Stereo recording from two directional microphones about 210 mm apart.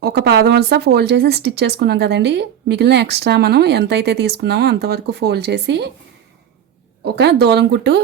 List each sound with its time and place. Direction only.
0.0 s speech: 50° right (ahead or behind)
7.0 s speech: 55° right (ahead or behind)